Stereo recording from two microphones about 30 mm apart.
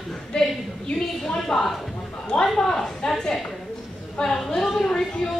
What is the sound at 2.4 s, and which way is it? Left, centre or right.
Speech, centre.